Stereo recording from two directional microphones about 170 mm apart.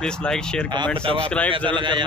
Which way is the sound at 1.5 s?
30° right (ahead or behind).